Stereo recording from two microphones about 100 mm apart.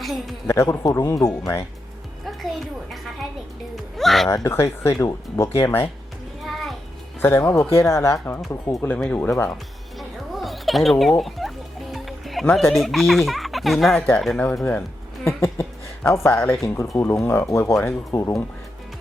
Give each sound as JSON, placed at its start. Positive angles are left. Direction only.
{"t": 0.0, "sound": "a woman's voice", "side_deg": 0}
{"t": 0.4, "sound": "speech", "side_deg": 30}
{"t": 2.2, "sound": "a sound", "side_deg": 0}
{"t": 4.4, "sound": "speech", "side_deg": 25}
{"t": 6.4, "sound": "music", "side_deg": 0}
{"t": 7.2, "sound": "speech", "side_deg": 25}
{"t": 10.0, "sound": "a sound", "side_deg": 0}
{"t": 11.2, "sound": "music", "side_deg": 0}
{"t": 12.7, "sound": "speech", "side_deg": 0}
{"t": 14.6, "sound": "music", "side_deg": 20}
{"t": 16.1, "sound": "speech", "side_deg": 25}